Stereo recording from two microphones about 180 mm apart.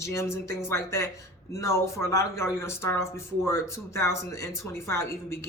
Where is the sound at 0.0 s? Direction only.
15° left (ahead or behind).